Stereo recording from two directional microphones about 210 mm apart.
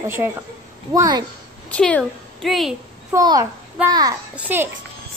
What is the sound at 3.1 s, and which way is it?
A woman's voice, 15° right (ahead or behind).